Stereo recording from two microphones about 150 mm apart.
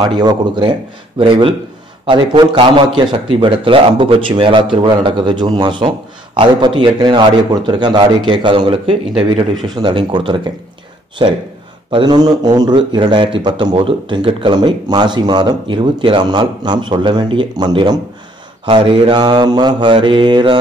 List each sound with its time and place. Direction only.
0.0 s a man's voice: 30° right (ahead or behind)